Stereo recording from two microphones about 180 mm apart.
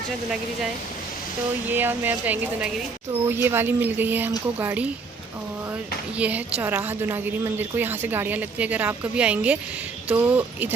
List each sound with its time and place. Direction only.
1.7 s a woman's voice: 10° right (ahead or behind)
6.1 s a woman's voice: 10° right (ahead or behind)